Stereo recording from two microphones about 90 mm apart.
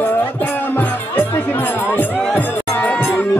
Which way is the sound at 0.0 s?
20° left (ahead or behind).